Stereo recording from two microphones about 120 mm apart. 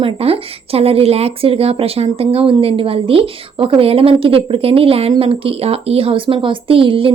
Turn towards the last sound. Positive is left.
turn(degrees=-50)  # may be behind; listen again after turning